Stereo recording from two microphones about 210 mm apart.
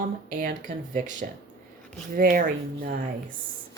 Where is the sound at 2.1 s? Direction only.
40° right (ahead or behind).